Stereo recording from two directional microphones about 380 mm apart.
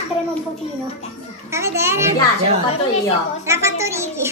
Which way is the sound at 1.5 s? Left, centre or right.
Centre.